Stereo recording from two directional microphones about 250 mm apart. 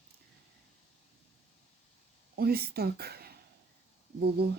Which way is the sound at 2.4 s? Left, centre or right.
Right.